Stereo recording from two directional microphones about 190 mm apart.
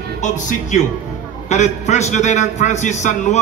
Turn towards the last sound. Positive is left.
turn(degrees=40)  # may be behind; listen again after turning